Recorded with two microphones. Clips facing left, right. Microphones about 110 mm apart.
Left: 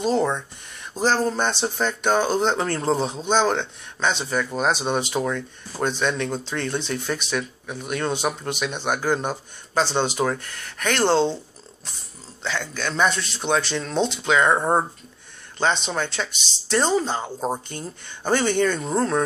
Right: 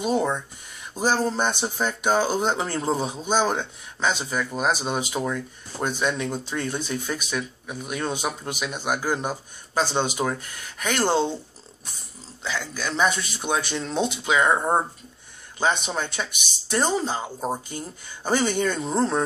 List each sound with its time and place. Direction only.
0.0 s speech: 15° right (ahead or behind)
12.4 s speech: 10° right (ahead or behind)
15.6 s speech: 10° right (ahead or behind)